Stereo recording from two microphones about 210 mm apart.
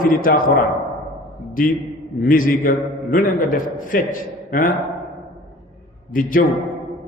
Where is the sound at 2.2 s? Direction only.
40° left (ahead or behind).